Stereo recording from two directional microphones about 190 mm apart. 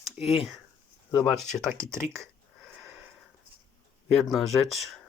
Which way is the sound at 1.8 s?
15° right (ahead or behind).